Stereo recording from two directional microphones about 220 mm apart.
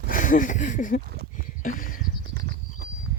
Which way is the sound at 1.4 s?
40° left (ahead or behind).